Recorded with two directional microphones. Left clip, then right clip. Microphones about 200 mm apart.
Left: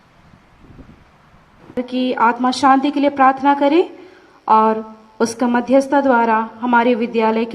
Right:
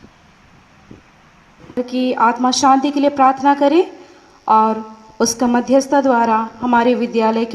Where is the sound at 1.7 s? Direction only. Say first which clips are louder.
Right 1 dB; 45° right (ahead or behind).